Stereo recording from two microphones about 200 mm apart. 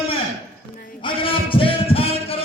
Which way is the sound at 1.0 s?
25° left (ahead or behind).